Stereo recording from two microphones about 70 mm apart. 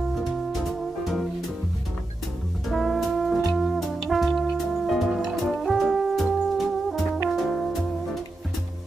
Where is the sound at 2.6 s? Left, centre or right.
Centre.